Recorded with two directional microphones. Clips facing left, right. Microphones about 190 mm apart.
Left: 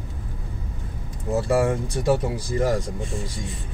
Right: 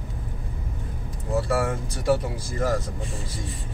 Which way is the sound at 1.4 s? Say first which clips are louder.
Left 4 dB; 20° left (ahead or behind).